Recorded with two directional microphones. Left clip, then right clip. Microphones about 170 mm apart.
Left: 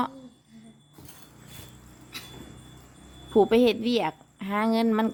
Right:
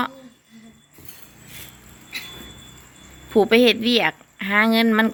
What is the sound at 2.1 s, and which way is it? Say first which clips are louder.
Vehicle: right 9 dB; 80° left.